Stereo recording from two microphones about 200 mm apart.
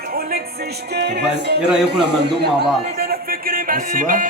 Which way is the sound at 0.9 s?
55° right (ahead or behind).